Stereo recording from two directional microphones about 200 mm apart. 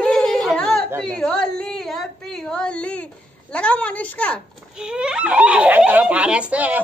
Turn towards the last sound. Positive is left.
turn(degrees=-5)  # may be behind; listen again after turning